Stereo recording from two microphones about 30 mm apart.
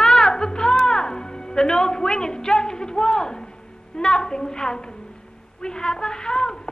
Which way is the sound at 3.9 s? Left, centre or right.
Left.